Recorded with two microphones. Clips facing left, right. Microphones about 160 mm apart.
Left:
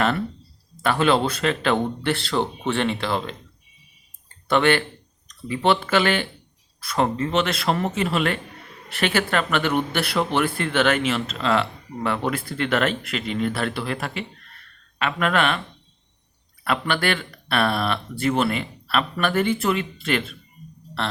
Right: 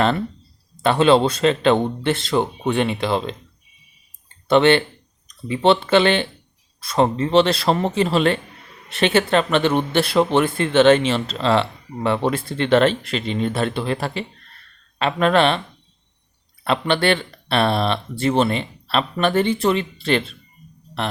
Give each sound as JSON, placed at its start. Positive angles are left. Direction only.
{"t": 0.8, "sound": "speech", "side_deg": -25}
{"t": 4.4, "sound": "speech", "side_deg": -25}
{"t": 16.6, "sound": "speech", "side_deg": -25}